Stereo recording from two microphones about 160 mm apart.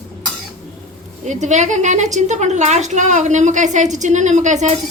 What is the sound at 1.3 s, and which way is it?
A woman's voice, 50° right (ahead or behind).